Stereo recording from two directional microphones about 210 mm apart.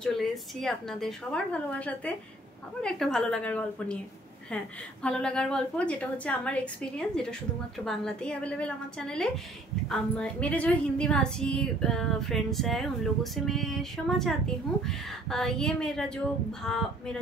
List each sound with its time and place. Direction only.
0.0 s a woman's voice: centre (ahead or behind)
5.0 s a woman's voice: 5° left (ahead or behind)